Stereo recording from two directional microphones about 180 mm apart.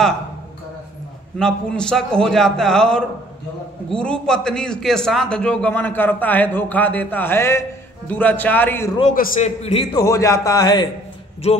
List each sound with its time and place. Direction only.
1.4 s a man's voice: 5° left (ahead or behind)
9.1 s a man's voice: 50° left (ahead or behind)
9.6 s a man's voice: 35° left (ahead or behind)
9.9 s a man's voice: 20° left (ahead or behind)